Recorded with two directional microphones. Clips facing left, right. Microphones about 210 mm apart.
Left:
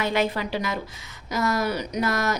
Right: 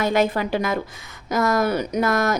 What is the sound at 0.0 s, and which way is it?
A woman's voice, 45° right (ahead or behind).